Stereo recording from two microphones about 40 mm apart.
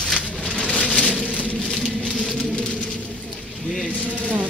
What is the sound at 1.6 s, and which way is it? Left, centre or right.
Rain on surface, centre.